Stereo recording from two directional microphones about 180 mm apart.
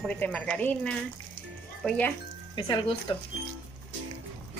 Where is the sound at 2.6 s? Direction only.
25° left (ahead or behind).